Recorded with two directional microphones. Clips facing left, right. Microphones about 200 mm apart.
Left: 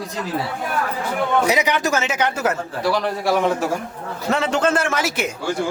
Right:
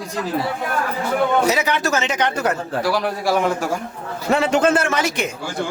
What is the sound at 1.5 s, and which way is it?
Speech, 15° left (ahead or behind).